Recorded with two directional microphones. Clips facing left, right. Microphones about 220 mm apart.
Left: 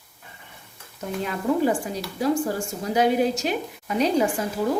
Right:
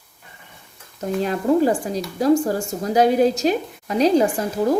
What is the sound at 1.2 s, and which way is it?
Speech, 35° right (ahead or behind).